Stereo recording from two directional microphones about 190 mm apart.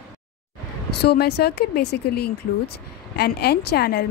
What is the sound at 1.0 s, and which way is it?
A woman's voice, 55° left (ahead or behind).